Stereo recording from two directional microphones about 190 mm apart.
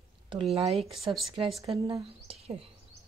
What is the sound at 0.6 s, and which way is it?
Speech, 30° right (ahead or behind).